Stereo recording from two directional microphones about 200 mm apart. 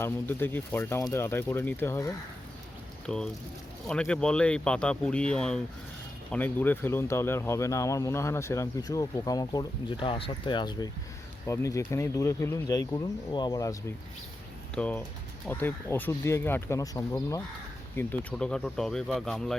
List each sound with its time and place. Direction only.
0.0 s speech: 10° left (ahead or behind)
14.8 s speech: 5° left (ahead or behind)